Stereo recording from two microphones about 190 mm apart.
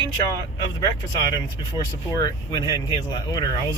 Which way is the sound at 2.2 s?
20° left (ahead or behind).